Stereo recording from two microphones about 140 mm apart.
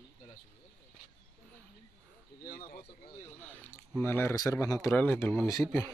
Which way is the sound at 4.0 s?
15° left (ahead or behind).